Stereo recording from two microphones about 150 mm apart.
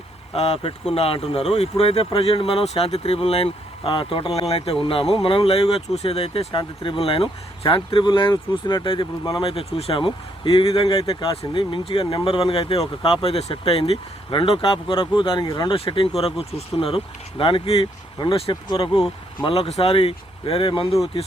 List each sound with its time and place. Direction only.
0.3 s speech: 40° left (ahead or behind)